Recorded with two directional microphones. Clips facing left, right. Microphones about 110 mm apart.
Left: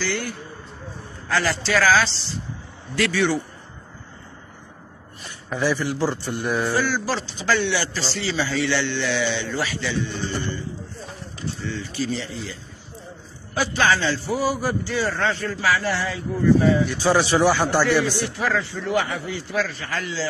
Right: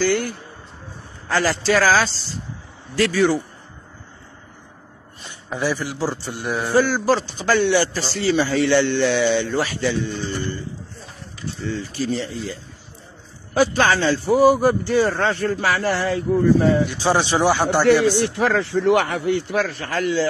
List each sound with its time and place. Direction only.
0.0 s a man's voice: 45° right (ahead or behind)
5.2 s a sound: 15° right (ahead or behind)
5.7 s a man's voice: 10° right (ahead or behind)
6.7 s a man's voice: 45° right (ahead or behind)
11.7 s a man's voice: 45° right (ahead or behind)
13.6 s a man's voice: 50° right (ahead or behind)
16.9 s a man's voice: 20° right (ahead or behind)
18.1 s a man's voice: 70° right (ahead or behind); by 20.2 s 55° right (ahead or behind)